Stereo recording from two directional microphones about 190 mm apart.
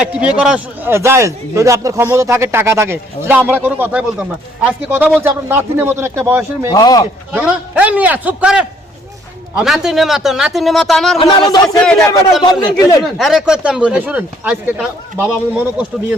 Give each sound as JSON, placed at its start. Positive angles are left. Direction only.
{"t": 0.0, "sound": "a man's voice", "side_deg": -5}
{"t": 6.7, "sound": "speech", "side_deg": 20}
{"t": 7.3, "sound": "a man's voice", "side_deg": -5}
{"t": 11.2, "sound": "speech", "side_deg": 25}
{"t": 11.8, "sound": "speech", "side_deg": 5}
{"t": 12.4, "sound": "speech", "side_deg": 25}
{"t": 13.0, "sound": "speech", "side_deg": 0}